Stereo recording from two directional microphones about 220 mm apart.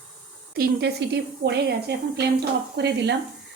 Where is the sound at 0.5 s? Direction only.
45° right (ahead or behind).